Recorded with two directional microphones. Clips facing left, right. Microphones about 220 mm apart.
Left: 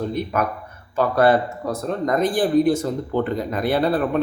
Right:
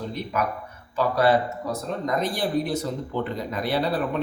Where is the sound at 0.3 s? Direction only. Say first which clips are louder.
Left 3 dB; 50° left (ahead or behind).